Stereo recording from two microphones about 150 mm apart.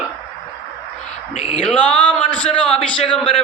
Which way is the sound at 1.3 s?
45° left (ahead or behind).